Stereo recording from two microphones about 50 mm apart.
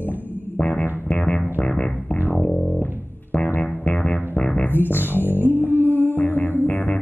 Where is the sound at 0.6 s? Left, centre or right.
Left.